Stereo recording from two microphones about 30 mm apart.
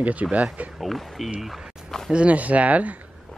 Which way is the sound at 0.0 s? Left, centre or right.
Right.